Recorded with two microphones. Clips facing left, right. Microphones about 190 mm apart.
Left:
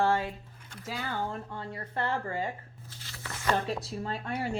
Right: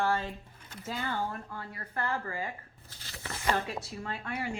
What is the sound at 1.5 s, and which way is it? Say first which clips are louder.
Speech: left 3 dB; 30° left (ahead or behind).